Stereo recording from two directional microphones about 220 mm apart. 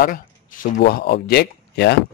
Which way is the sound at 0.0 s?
40° left (ahead or behind).